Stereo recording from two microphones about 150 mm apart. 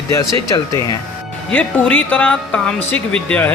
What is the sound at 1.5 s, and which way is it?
Speech, 10° left (ahead or behind).